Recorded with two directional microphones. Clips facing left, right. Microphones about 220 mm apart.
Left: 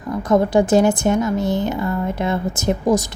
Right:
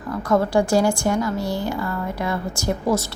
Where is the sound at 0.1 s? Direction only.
20° left (ahead or behind).